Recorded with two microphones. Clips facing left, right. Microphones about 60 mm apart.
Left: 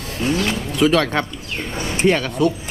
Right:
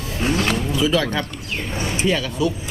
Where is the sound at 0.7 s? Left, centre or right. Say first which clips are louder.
Left 5 dB; left.